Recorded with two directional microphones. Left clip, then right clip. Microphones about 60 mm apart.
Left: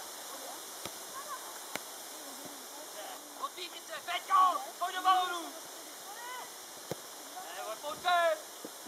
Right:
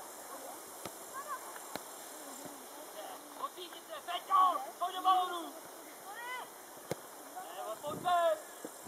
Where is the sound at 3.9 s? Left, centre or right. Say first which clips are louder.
Left 2 dB; right.